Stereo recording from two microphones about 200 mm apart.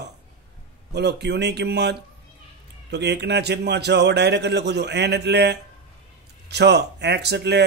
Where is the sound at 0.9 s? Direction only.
55° right (ahead or behind).